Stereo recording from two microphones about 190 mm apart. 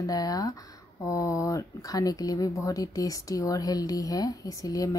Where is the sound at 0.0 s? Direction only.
20° left (ahead or behind).